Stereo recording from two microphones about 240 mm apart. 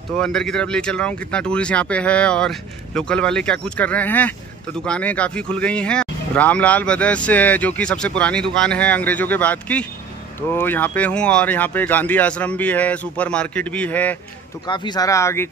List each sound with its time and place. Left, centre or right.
0.2 s speech: centre
14.7 s speech: centre